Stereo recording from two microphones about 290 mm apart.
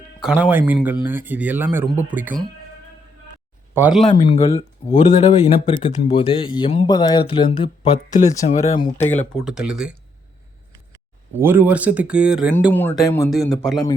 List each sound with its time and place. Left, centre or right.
0.2 s speech: centre
3.8 s speech: centre
4.0 s speech: centre
9.4 s speech: centre
11.3 s speech: centre